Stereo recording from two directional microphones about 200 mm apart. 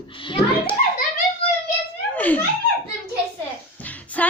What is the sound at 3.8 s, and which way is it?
Music, 10° left (ahead or behind).